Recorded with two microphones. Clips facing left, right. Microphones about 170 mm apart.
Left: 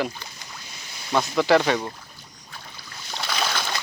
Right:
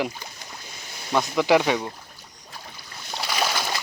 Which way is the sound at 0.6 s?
50° right (ahead or behind).